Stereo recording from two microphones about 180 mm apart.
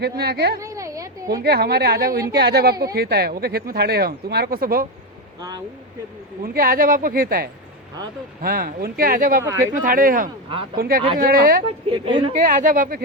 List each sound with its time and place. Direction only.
0.0 s speech: 65° right (ahead or behind)
0.6 s a sound: 20° right (ahead or behind)
1.5 s speech: 60° right (ahead or behind)
5.4 s speech: 20° right (ahead or behind)
6.4 s a woman's voice: 55° right (ahead or behind)
9.4 s speech: 20° right (ahead or behind)
9.7 s a woman's voice: 50° right (ahead or behind)
11.9 s speech: 25° right (ahead or behind)
12.1 s a woman's voice: 45° right (ahead or behind)